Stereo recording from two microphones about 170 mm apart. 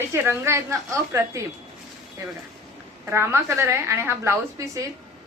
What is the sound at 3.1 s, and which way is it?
A woman's voice, 15° right (ahead or behind).